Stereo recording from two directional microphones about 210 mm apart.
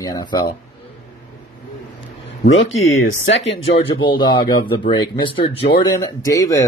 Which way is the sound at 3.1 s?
60° left (ahead or behind).